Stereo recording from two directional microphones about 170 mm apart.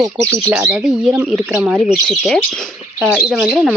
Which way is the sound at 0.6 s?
5° right (ahead or behind).